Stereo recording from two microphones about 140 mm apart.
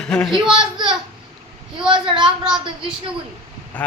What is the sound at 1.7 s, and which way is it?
A woman's voice, 35° right (ahead or behind).